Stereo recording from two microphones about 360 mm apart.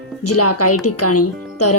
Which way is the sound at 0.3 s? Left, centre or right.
Left.